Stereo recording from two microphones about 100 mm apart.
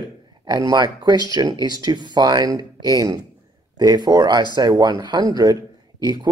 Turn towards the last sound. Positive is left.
turn(degrees=-40)  # may be behind; listen again after turning